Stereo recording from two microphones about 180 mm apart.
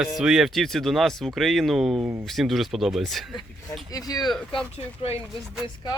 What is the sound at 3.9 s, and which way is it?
Speech, 20° left (ahead or behind).